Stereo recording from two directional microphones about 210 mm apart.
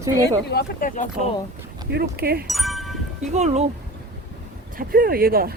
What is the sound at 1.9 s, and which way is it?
Speech, 50° right (ahead or behind).